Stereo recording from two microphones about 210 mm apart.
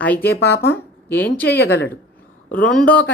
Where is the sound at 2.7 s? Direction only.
5° left (ahead or behind).